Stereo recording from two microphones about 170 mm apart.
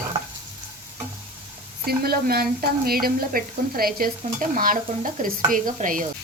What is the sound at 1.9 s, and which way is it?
A woman's voice, 65° right (ahead or behind).